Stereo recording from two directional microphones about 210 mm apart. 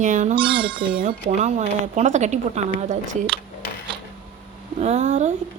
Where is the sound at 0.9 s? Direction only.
35° right (ahead or behind).